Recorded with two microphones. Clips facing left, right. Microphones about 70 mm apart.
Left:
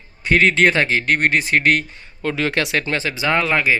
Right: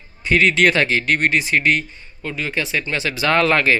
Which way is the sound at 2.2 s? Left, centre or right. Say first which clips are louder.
Left 4 dB; left.